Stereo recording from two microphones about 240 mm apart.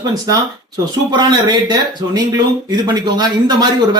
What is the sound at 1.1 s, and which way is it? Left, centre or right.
A man's voice, centre.